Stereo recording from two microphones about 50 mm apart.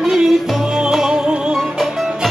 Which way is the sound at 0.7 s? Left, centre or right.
Centre.